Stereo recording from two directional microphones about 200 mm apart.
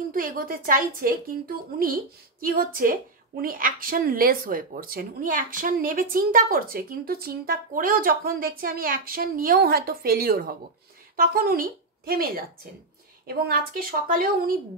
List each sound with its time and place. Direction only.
0.1 s speech: 45° right (ahead or behind)
2.4 s a woman's voice: 45° right (ahead or behind)